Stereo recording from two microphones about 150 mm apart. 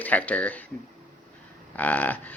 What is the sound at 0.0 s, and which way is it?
Speech, 10° left (ahead or behind).